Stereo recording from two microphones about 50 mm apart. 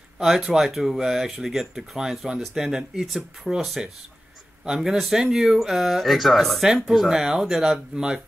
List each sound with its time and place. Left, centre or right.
0.2 s speech: centre
4.6 s speech: centre
7.9 s speech: centre